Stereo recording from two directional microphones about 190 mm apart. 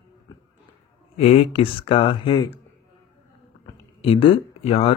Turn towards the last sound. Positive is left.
turn(degrees=30)  # may be behind; listen again after turning